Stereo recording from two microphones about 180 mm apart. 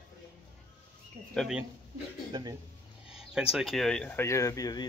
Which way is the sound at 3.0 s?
5° right (ahead or behind).